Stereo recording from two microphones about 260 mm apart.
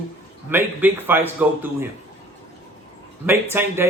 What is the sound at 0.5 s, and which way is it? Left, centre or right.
A man's voice, centre.